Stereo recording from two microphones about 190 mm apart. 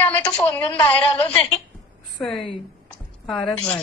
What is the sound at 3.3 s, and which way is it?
Speech, 5° left (ahead or behind).